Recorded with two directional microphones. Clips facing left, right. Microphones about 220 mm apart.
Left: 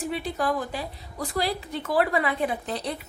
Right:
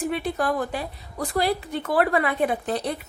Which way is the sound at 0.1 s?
55° right (ahead or behind).